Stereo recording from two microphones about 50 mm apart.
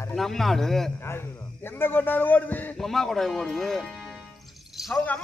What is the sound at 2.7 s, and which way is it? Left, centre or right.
Speech, centre.